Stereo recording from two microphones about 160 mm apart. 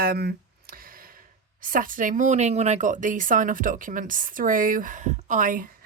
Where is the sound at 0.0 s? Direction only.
75° right (ahead or behind).